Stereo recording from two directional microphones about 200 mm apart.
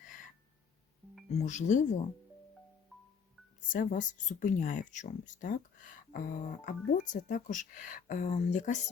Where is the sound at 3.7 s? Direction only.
40° left (ahead or behind).